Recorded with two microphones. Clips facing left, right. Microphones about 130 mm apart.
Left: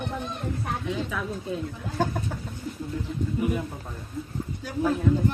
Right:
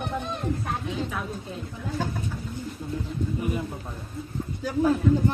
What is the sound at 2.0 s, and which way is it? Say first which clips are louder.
Speech: left 5 dB; 50° left (ahead or behind).